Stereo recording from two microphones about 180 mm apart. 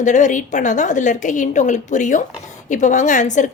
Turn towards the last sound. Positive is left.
turn(degrees=45)  # may be behind; listen again after turning